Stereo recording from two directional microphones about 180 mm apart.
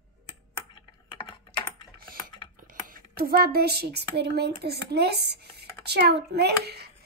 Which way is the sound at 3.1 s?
55° right (ahead or behind).